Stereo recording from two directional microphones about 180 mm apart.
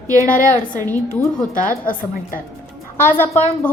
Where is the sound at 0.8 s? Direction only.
10° left (ahead or behind).